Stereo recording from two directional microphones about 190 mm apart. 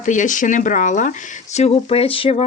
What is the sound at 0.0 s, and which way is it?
Speech, 40° left (ahead or behind).